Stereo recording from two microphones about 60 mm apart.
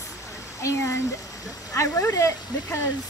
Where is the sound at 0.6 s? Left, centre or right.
Left.